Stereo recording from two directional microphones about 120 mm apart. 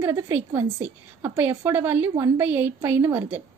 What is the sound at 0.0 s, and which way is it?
A woman's voice, 20° right (ahead or behind).